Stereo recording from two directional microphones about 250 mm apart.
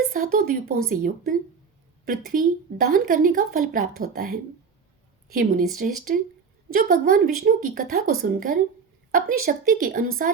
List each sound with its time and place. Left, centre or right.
0.1 s a woman's voice: right
5.7 s a woman's voice: right